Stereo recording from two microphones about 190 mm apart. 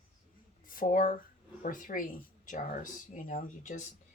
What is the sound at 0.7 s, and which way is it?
Speech, 45° left (ahead or behind).